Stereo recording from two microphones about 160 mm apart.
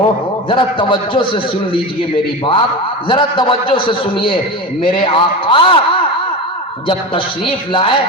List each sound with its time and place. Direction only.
0.4 s a man's voice: 30° left (ahead or behind)
6.8 s a man's voice: 35° left (ahead or behind)